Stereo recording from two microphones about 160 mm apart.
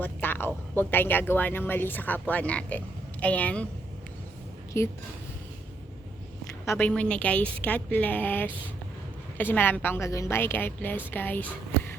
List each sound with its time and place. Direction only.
0.0 s speech: 10° left (ahead or behind)
4.7 s a woman's voice: 15° left (ahead or behind)
6.7 s a woman's voice: 10° left (ahead or behind)